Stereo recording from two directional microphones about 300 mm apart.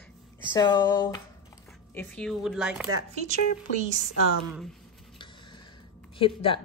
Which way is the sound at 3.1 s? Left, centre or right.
Right.